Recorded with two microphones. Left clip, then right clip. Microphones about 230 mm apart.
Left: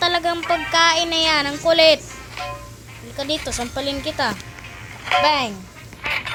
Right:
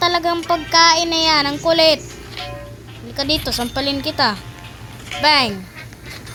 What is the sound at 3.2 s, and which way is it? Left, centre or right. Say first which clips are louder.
Speech: right 4 dB; centre.